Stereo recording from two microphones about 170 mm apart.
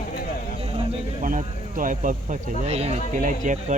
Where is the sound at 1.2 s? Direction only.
50° right (ahead or behind).